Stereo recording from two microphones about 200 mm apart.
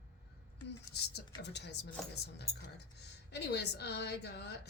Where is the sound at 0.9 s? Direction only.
55° left (ahead or behind).